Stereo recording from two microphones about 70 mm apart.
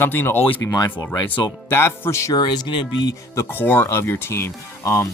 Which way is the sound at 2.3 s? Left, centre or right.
Left.